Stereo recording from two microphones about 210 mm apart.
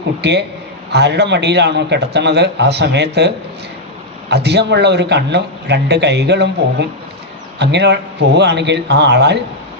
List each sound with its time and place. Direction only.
0.2 s a man's voice: 55° right (ahead or behind)